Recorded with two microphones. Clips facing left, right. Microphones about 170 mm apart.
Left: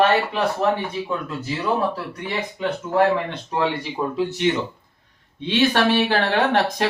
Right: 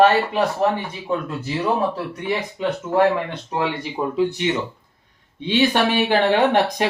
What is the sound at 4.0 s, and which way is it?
Speech, 10° right (ahead or behind).